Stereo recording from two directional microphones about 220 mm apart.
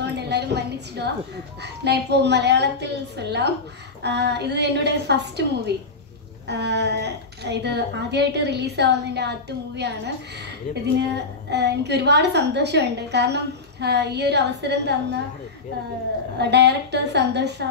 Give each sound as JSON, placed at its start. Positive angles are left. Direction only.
{"t": 0.0, "sound": "a sound", "side_deg": -50}
{"t": 1.6, "sound": "a woman's voice", "side_deg": -50}
{"t": 16.3, "sound": "a woman's voice", "side_deg": -50}